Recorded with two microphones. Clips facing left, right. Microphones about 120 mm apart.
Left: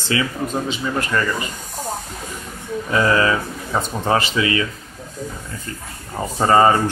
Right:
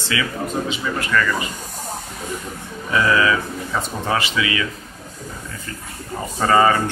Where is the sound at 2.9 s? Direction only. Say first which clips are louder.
Even; 35° left (ahead or behind).